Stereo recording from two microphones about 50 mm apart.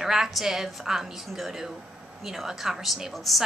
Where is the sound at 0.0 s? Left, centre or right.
Centre.